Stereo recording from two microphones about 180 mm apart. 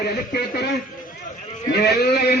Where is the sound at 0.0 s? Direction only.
65° left (ahead or behind).